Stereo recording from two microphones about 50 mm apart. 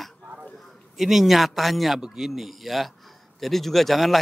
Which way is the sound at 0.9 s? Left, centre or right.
Centre.